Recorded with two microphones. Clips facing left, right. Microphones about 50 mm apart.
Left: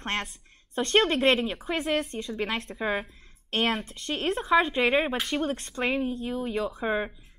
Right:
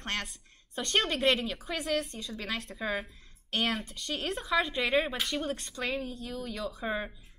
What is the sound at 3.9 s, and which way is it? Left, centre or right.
Speech, left.